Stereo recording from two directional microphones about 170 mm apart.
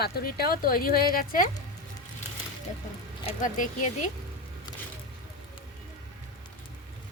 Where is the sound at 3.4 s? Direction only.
50° left (ahead or behind).